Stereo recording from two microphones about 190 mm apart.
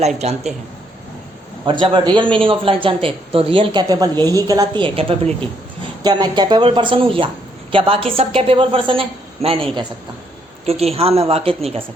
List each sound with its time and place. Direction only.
0.2 s a woman's voice: 35° right (ahead or behind)
1.6 s a man's voice: 25° right (ahead or behind)
10.7 s a woman's voice: 30° right (ahead or behind)